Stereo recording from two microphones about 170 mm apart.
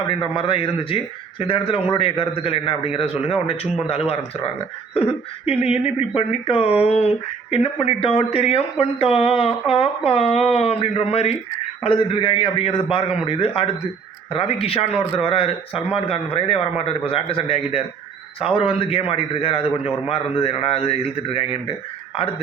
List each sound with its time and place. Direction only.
0.2 s a man's voice: 30° left (ahead or behind)
5.5 s a man's voice: 35° left (ahead or behind)